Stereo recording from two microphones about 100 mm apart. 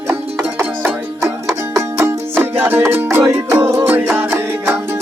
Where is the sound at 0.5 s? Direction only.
25° right (ahead or behind).